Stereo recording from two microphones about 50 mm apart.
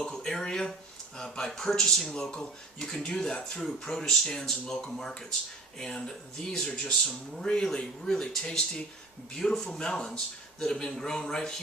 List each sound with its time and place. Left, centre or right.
0.0 s speech: centre